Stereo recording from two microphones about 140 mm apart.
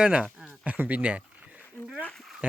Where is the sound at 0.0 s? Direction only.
5° right (ahead or behind).